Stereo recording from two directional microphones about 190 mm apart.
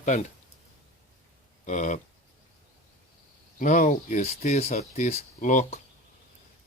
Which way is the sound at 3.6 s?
40° left (ahead or behind).